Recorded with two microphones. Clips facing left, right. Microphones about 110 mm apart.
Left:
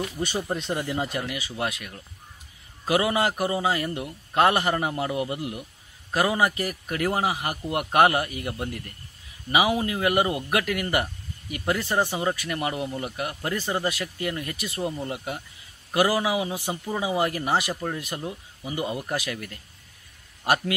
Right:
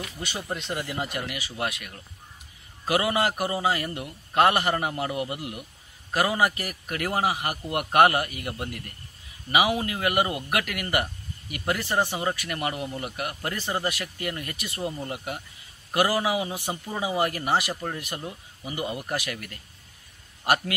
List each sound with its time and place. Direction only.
0.0 s speech: 35° left (ahead or behind)
0.7 s a man's voice: 25° left (ahead or behind)
2.9 s a man's voice: 20° left (ahead or behind)
11.8 s speech: 5° right (ahead or behind)
12.2 s a man's voice: 10° left (ahead or behind)
16.6 s speech: centre (ahead or behind)
17.0 s a man's voice: 20° left (ahead or behind)
20.4 s a man's voice: 20° left (ahead or behind)